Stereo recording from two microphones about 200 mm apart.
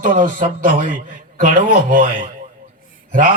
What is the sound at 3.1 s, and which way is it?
Mantra, 40° right (ahead or behind).